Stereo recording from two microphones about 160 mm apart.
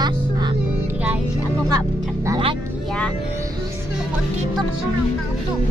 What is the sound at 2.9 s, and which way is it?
Music, 5° left (ahead or behind).